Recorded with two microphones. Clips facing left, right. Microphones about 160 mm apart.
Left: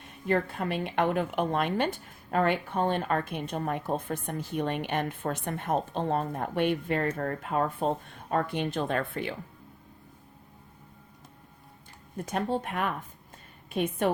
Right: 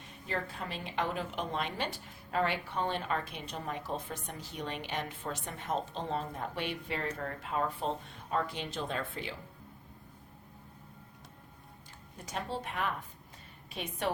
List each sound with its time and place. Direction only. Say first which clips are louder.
0.3 s a woman's voice: left 10 dB; 60° left (ahead or behind)
12.1 s a woman's voice: left 8 dB; 55° left (ahead or behind)